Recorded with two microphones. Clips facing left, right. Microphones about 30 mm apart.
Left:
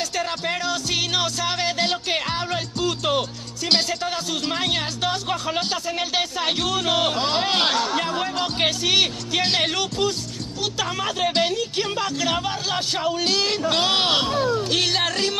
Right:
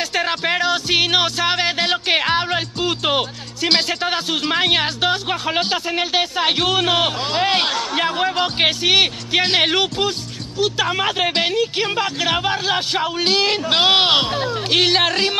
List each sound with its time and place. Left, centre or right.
0.1 s music: right
4.0 s a sound: right
4.4 s speech: right